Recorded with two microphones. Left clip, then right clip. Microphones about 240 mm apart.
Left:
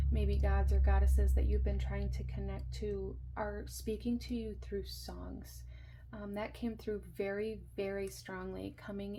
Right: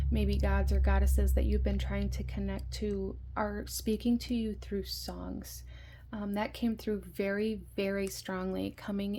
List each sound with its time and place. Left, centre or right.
0.1 s speech: right